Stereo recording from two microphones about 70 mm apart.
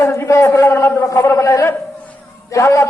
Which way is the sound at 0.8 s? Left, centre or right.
Left.